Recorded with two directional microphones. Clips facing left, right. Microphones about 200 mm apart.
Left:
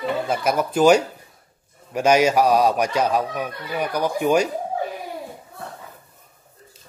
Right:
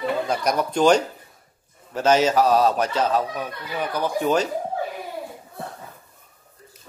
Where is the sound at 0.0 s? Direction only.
5° left (ahead or behind).